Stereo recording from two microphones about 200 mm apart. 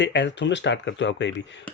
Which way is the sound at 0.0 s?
60° left (ahead or behind).